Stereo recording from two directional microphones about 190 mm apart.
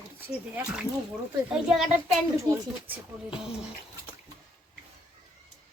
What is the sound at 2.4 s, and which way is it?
Speech, 15° right (ahead or behind).